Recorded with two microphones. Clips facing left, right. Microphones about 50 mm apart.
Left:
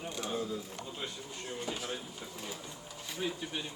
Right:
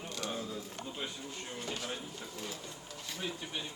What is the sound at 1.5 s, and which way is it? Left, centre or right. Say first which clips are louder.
Speech: left 2 dB; centre.